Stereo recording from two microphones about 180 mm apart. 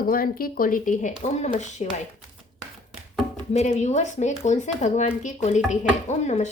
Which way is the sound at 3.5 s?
40° left (ahead or behind).